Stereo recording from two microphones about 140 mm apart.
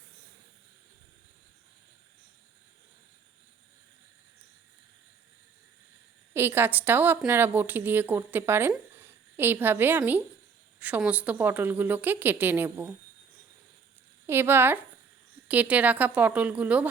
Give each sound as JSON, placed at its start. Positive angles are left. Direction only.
{"t": 6.3, "sound": "a woman's voice", "side_deg": -15}
{"t": 14.3, "sound": "a woman's voice", "side_deg": -15}